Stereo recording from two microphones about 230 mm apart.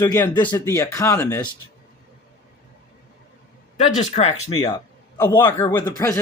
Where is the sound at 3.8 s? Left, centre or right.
Left.